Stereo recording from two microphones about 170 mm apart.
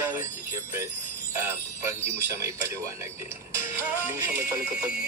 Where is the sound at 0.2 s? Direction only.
15° right (ahead or behind).